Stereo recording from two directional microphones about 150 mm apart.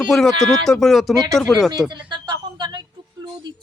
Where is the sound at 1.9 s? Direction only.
30° right (ahead or behind).